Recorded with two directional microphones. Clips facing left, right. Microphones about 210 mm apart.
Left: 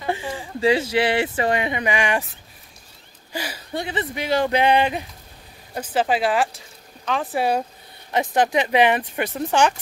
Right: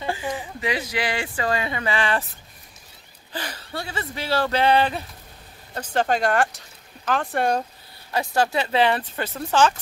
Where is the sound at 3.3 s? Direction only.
10° left (ahead or behind).